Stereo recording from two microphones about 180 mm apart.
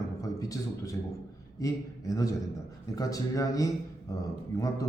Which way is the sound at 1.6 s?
20° left (ahead or behind).